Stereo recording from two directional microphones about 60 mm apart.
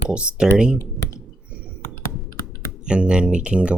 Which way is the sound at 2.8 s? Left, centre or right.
Centre.